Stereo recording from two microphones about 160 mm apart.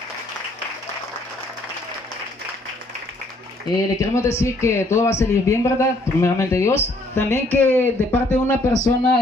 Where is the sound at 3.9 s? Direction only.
20° left (ahead or behind).